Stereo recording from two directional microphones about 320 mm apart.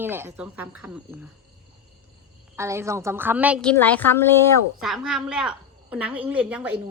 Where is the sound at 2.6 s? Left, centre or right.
Centre.